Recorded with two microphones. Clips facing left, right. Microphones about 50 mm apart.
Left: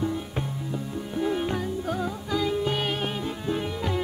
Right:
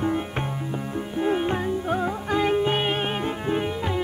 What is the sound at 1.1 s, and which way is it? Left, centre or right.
Music, right.